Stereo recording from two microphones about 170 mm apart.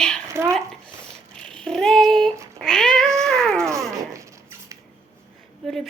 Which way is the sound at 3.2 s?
5° left (ahead or behind).